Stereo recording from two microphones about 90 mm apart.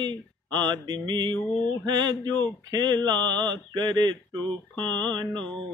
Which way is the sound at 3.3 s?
55° right (ahead or behind).